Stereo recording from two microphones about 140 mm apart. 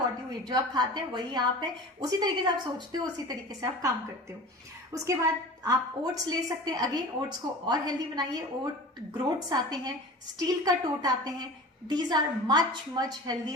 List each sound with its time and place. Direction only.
0.4 s a woman's voice: 30° right (ahead or behind)